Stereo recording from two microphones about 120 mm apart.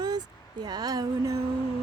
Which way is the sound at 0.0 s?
35° right (ahead or behind).